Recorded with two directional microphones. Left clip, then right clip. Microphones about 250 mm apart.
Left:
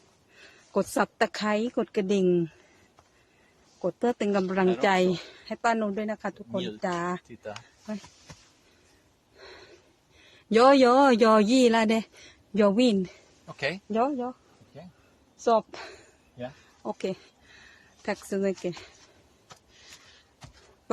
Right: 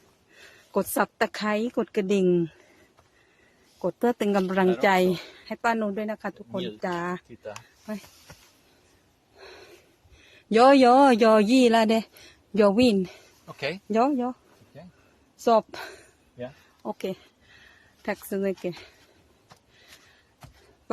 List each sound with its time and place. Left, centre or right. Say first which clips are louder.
0.3 s speech: right 1 dB; centre
3.8 s speech: right 2 dB; centre
9.4 s bow-wow: right 1 dB; centre
10.2 s a man's voice: right 2 dB; centre
13.5 s speech: even; centre
13.9 s a woman's voice: right 5 dB; right
15.4 s a woman's voice: right 2 dB; right
16.4 s speech: right 1 dB; centre